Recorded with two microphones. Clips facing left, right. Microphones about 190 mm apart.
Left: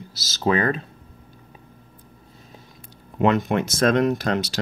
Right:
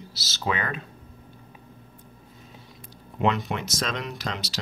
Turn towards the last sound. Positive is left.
turn(degrees=55)  # may be behind; listen again after turning